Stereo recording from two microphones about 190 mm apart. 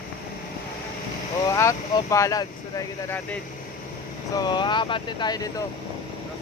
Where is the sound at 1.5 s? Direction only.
15° left (ahead or behind).